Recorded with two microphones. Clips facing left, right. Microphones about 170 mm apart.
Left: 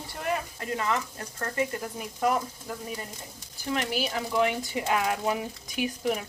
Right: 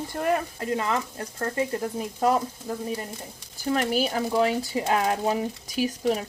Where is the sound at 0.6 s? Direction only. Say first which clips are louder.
Right 3 dB; 25° right (ahead or behind).